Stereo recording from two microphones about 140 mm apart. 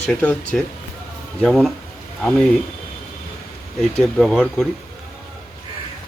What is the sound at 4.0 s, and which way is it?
Speech, centre (ahead or behind).